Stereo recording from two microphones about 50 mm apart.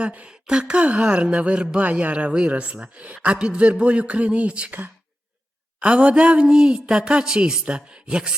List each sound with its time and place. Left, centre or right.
0.0 s speech: right
5.8 s speech: right